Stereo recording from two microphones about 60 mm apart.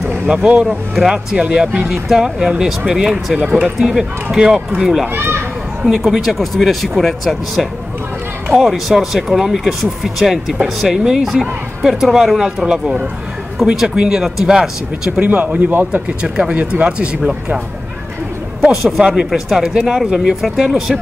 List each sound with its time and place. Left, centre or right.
0.1 s speech: centre
3.4 s speech: right
3.8 s speech: centre
5.1 s speech: right
5.9 s speech: centre
15.1 s speech: right
16.2 s speech: centre
17.2 s speech: centre
18.9 s speech: centre